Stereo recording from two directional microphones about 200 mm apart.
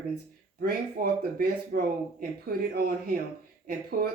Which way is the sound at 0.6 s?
50° right (ahead or behind).